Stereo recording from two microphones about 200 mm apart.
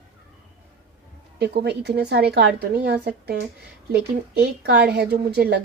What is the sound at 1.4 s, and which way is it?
A woman's voice, 55° right (ahead or behind).